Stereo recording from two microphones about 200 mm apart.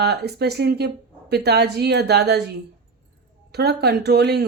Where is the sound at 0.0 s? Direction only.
55° right (ahead or behind).